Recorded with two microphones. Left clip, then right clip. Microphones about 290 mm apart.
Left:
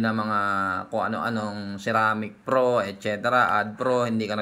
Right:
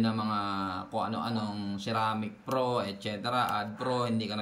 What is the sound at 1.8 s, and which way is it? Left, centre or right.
Speech, centre.